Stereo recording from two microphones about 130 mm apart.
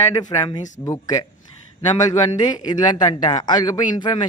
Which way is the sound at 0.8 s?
25° left (ahead or behind).